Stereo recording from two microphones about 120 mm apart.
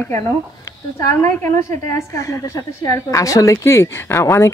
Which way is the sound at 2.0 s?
25° left (ahead or behind).